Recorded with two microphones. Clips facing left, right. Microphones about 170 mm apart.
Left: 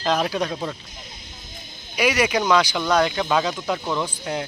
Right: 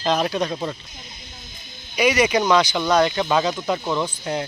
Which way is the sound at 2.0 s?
5° left (ahead or behind).